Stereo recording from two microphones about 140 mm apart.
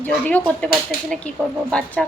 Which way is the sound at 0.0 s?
10° left (ahead or behind).